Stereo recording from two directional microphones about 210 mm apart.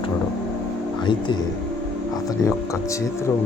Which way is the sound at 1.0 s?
20° left (ahead or behind).